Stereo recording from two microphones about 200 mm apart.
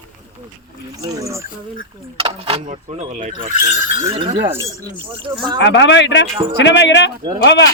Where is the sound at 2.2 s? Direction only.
25° right (ahead or behind).